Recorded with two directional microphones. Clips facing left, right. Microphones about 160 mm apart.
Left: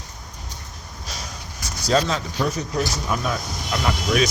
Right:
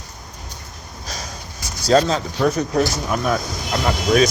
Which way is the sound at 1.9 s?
35° right (ahead or behind).